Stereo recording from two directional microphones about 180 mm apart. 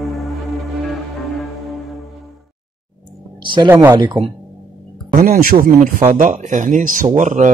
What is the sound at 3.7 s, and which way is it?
Speech, 15° right (ahead or behind).